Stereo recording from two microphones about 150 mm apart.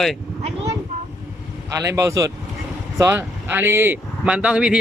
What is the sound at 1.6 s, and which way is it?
Speech, 20° right (ahead or behind).